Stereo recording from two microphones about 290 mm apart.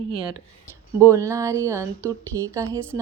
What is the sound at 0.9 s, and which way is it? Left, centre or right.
Speech, centre.